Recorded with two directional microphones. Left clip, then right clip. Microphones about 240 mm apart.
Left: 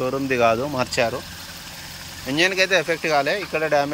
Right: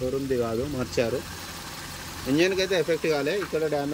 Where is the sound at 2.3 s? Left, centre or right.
Centre.